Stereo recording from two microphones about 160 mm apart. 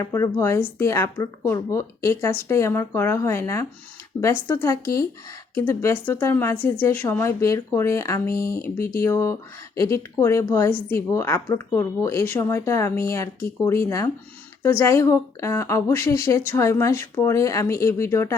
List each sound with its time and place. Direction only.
0.0 s a woman's voice: 20° left (ahead or behind)